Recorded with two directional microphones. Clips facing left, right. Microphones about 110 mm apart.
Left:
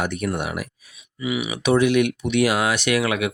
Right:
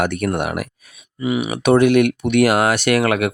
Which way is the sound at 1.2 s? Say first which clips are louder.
Right 5 dB; 45° right (ahead or behind).